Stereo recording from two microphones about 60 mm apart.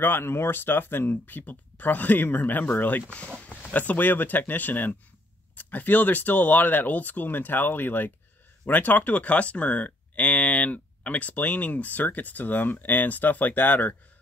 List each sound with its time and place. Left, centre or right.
0.0 s speech: left